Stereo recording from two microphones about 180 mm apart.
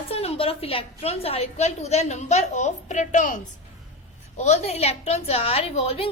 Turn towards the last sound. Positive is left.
turn(degrees=35)  # may be behind; listen again after turning